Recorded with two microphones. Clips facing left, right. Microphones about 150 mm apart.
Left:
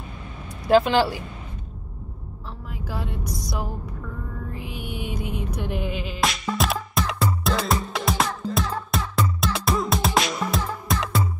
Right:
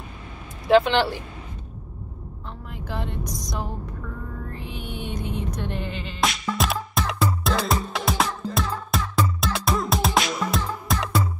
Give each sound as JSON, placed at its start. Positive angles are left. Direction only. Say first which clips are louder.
{"t": 0.7, "sound": "speech", "louder": "even", "side_deg": 0}
{"t": 2.7, "sound": "music", "louder": "even", "side_deg": 10}